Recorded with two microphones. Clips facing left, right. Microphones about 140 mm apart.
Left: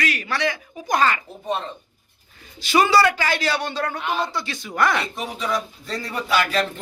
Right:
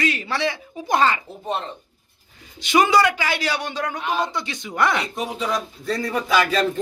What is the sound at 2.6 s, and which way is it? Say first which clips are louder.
A man's voice: even; 20° right (ahead or behind).